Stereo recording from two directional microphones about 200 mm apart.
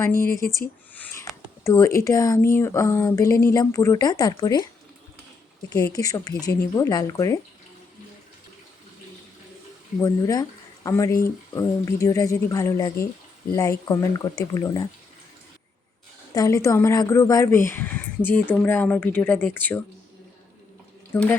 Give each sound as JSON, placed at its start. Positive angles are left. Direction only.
{"t": 0.0, "sound": "speech", "side_deg": 15}
{"t": 0.9, "sound": "a sound", "side_deg": 10}
{"t": 1.6, "sound": "speech", "side_deg": 15}
{"t": 5.7, "sound": "speech", "side_deg": 15}
{"t": 10.0, "sound": "speech", "side_deg": 15}
{"t": 16.3, "sound": "speech", "side_deg": 15}
{"t": 21.1, "sound": "speech", "side_deg": 10}